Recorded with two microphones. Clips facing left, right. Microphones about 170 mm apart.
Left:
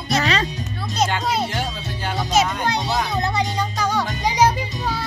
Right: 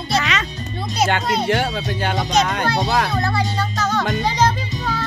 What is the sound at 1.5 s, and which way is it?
Speech, 70° right (ahead or behind).